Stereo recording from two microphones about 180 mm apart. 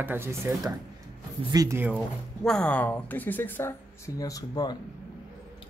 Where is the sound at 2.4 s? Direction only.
5° left (ahead or behind); by 4.8 s 20° left (ahead or behind).